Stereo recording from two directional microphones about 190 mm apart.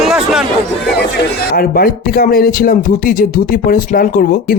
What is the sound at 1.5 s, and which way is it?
Speech, 50° left (ahead or behind).